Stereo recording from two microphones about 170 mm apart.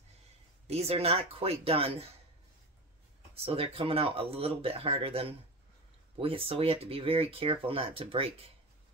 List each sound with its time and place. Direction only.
0.7 s speech: 40° right (ahead or behind)
3.3 s speech: 35° right (ahead or behind)